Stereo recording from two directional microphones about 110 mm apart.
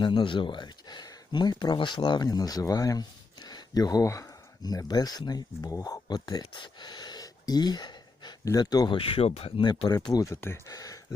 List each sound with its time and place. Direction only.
0.0 s speech: 45° left (ahead or behind)
9.0 s speech: 55° left (ahead or behind)
9.6 s speech: 40° left (ahead or behind)
10.2 s speech: 25° left (ahead or behind)